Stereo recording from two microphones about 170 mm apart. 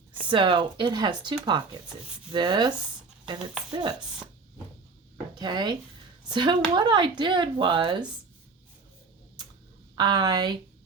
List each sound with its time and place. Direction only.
0.3 s speech: 30° right (ahead or behind)
5.3 s speech: 25° right (ahead or behind)
9.9 s speech: 25° right (ahead or behind)